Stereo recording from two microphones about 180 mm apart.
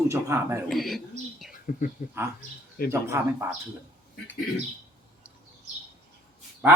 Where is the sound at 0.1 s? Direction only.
15° right (ahead or behind).